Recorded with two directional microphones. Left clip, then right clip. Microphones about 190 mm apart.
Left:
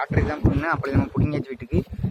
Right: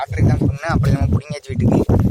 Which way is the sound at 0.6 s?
70° right (ahead or behind).